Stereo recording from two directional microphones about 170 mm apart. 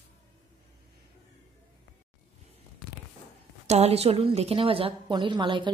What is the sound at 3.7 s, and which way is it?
A woman's voice, 40° right (ahead or behind).